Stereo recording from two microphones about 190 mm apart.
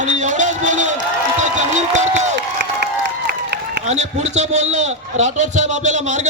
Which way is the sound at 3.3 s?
60° right (ahead or behind).